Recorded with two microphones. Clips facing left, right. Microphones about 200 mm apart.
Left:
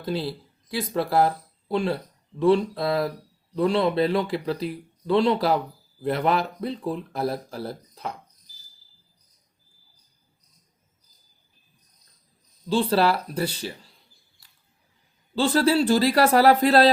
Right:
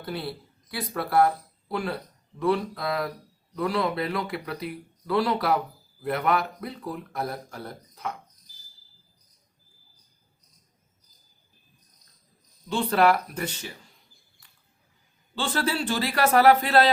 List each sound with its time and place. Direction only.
0.0 s speech: 25° left (ahead or behind)
12.6 s speech: 30° left (ahead or behind)
15.4 s speech: 35° left (ahead or behind)